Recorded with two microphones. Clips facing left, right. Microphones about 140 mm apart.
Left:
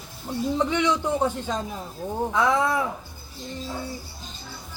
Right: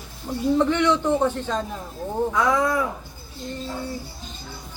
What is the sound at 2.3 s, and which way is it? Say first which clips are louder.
Speech: even; 25° left (ahead or behind).